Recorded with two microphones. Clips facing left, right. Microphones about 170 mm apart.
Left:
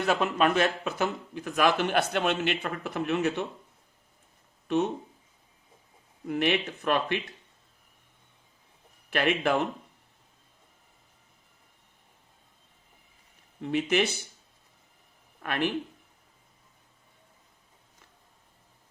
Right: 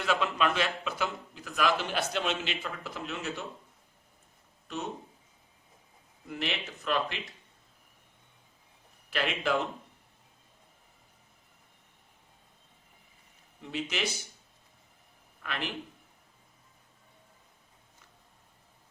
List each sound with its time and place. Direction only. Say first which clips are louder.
0.0 s a man's voice: left 4 dB; 45° left (ahead or behind); by 3.4 s 60° left (ahead or behind)
6.2 s a man's voice: left 9 dB; 60° left (ahead or behind)
9.0 s a man's voice: left 5 dB; 55° left (ahead or behind)
13.6 s a man's voice: left 9 dB; 60° left (ahead or behind)
15.4 s a man's voice: left 8 dB; 55° left (ahead or behind)